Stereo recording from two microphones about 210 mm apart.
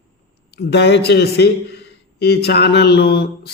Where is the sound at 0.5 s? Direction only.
55° left (ahead or behind).